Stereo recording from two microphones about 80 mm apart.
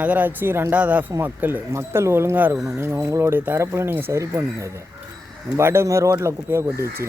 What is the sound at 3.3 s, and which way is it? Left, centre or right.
Speech, right.